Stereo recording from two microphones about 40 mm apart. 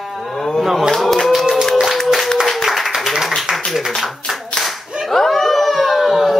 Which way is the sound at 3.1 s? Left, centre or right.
Centre.